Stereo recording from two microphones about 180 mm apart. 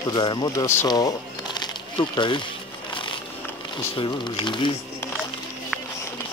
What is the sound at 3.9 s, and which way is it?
Speech, 25° left (ahead or behind).